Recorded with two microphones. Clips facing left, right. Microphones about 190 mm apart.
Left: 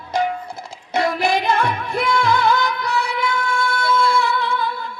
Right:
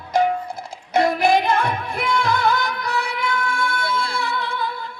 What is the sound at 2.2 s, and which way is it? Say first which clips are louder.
Music: left 2 dB; 55° right (ahead or behind).